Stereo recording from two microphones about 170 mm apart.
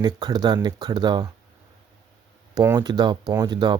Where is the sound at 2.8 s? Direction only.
25° right (ahead or behind).